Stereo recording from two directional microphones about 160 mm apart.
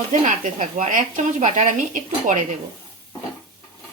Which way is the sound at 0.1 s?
50° right (ahead or behind).